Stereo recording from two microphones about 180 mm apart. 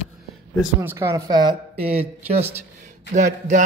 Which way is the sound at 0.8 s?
15° right (ahead or behind).